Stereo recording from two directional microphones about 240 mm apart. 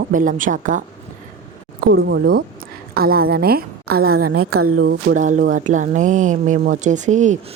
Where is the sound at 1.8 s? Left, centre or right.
Right.